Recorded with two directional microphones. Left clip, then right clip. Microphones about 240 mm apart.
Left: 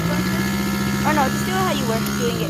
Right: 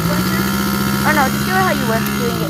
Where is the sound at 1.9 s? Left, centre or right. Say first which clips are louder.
Right 4 dB; centre.